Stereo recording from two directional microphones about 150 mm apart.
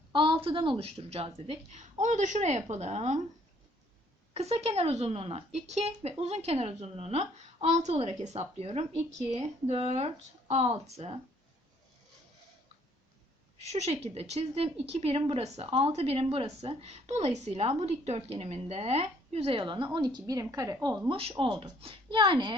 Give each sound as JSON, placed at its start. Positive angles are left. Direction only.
{"t": 0.1, "sound": "a woman's voice", "side_deg": -35}
{"t": 2.0, "sound": "a woman's voice", "side_deg": -55}
{"t": 4.4, "sound": "a woman's voice", "side_deg": -45}
{"t": 13.6, "sound": "a woman's voice", "side_deg": -45}
{"t": 21.1, "sound": "a woman's voice", "side_deg": -35}